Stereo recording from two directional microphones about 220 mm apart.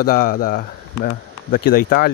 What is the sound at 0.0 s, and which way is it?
Speech, 40° left (ahead or behind).